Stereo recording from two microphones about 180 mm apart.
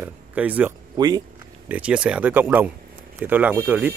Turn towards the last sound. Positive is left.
turn(degrees=-10)  # may be behind; listen again after turning